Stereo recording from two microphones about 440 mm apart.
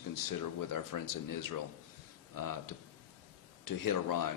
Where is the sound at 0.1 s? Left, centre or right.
Left.